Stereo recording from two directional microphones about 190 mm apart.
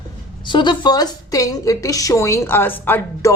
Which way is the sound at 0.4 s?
25° left (ahead or behind).